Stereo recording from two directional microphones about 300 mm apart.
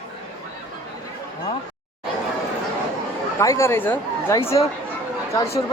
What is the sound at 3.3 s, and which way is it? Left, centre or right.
Speech, centre.